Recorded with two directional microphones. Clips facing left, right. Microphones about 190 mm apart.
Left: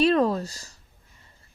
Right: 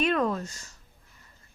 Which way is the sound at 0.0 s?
35° left (ahead or behind).